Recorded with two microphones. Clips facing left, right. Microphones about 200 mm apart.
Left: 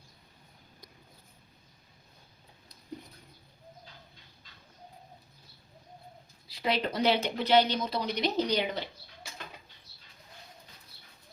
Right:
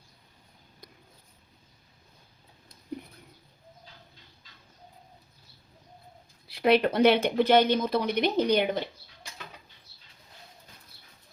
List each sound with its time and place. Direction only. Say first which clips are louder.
6.5 s speech: right 8 dB; 60° right (ahead or behind)